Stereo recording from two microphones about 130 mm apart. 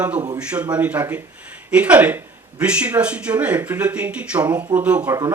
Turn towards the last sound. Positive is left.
turn(degrees=-25)  # may be behind; listen again after turning